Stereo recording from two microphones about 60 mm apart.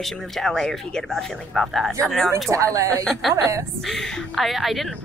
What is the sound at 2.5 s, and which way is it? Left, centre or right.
Speech, right.